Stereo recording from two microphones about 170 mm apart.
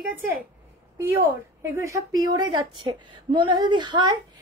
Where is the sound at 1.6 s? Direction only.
15° right (ahead or behind).